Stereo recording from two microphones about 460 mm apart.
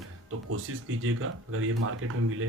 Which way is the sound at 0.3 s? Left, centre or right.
Right.